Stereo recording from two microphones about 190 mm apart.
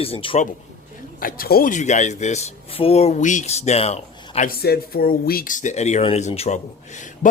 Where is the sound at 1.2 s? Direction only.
50° left (ahead or behind).